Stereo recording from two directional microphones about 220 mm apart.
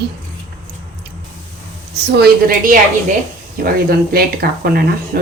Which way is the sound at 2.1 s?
45° right (ahead or behind).